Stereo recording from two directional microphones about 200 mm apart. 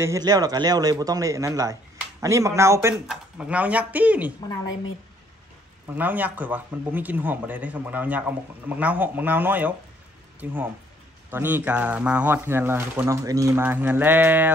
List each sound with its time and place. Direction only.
0.0 s speech: 15° right (ahead or behind)
5.9 s speech: 10° right (ahead or behind)